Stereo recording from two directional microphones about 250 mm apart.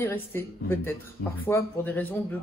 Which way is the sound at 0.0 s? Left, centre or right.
Centre.